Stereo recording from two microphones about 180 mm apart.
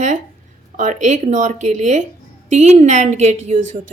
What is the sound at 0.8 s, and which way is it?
A woman's voice, 45° right (ahead or behind).